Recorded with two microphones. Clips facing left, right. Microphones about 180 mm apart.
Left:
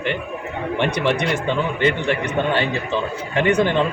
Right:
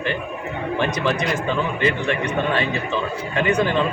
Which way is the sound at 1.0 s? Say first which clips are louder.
Left 2 dB; 25° left (ahead or behind).